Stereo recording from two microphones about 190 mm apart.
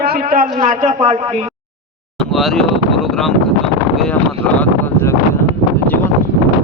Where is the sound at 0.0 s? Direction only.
50° right (ahead or behind).